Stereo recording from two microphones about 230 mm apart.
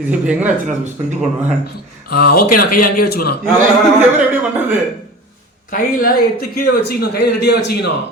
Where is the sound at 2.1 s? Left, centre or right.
Left.